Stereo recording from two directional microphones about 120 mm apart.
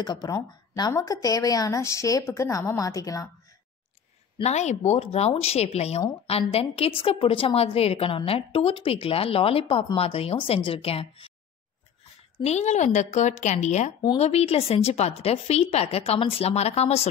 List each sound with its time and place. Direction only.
0.0 s speech: 35° left (ahead or behind)
4.4 s a woman's voice: 70° left (ahead or behind); by 11.3 s 50° left (ahead or behind)
12.4 s speech: 70° left (ahead or behind)
14.1 s a woman's voice: 60° left (ahead or behind)